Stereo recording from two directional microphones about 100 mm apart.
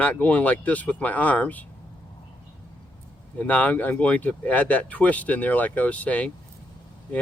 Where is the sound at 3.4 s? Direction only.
15° left (ahead or behind).